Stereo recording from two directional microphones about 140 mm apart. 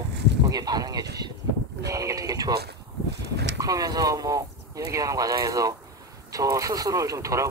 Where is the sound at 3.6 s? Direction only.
25° right (ahead or behind).